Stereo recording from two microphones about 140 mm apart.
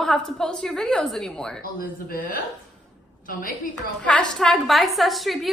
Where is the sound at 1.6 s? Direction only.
85° left.